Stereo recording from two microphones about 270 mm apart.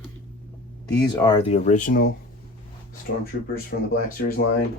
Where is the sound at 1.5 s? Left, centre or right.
Left.